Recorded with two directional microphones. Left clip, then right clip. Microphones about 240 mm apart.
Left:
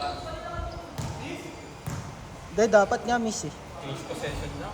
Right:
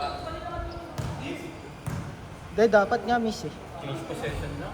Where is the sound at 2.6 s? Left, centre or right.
Left.